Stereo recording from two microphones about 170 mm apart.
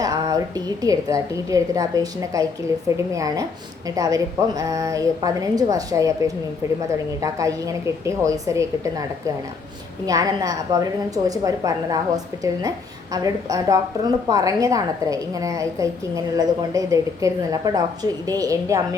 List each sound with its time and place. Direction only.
0.0 s a woman's voice: 20° right (ahead or behind)